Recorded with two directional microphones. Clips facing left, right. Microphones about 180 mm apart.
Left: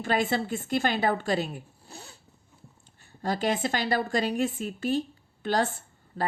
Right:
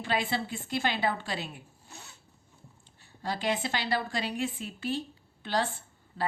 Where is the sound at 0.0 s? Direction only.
45° left (ahead or behind).